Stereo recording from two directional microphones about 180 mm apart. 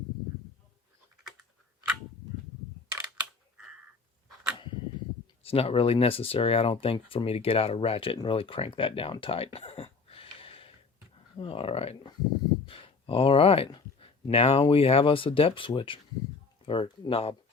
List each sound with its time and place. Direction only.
5.4 s speech: 30° left (ahead or behind)